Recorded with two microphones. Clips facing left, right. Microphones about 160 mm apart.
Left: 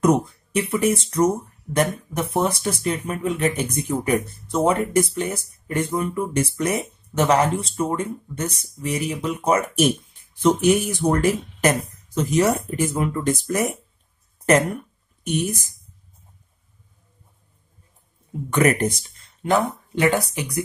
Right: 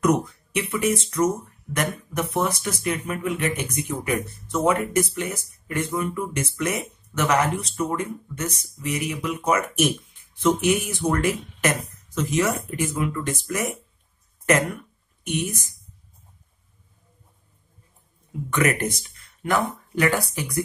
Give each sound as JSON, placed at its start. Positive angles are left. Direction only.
{"t": 0.0, "sound": "speech", "side_deg": 30}
{"t": 15.2, "sound": "speech", "side_deg": 35}
{"t": 18.5, "sound": "speech", "side_deg": 35}